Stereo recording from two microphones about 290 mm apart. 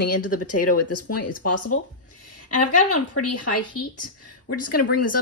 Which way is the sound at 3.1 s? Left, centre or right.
Left.